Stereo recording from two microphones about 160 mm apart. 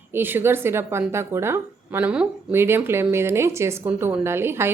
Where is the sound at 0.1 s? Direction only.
15° right (ahead or behind).